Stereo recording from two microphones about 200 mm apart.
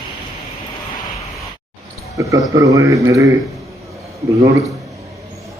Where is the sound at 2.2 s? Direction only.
15° right (ahead or behind).